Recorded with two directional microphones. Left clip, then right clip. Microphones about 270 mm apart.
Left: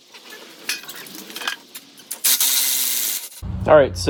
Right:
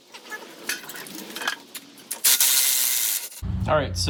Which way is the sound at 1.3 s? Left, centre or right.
Centre.